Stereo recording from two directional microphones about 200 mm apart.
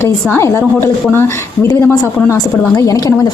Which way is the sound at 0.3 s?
15° left (ahead or behind).